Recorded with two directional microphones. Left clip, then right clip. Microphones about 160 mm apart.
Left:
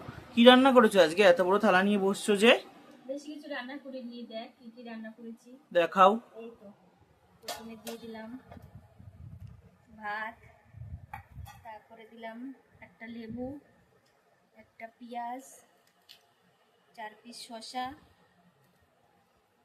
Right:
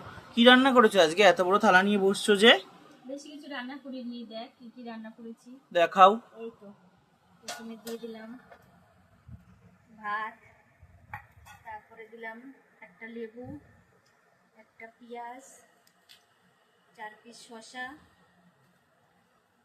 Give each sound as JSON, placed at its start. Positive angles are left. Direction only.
{"t": 0.3, "sound": "speech", "side_deg": 15}
{"t": 5.7, "sound": "speech", "side_deg": 10}
{"t": 10.0, "sound": "a woman's voice", "side_deg": 90}
{"t": 16.9, "sound": "a woman's voice", "side_deg": 90}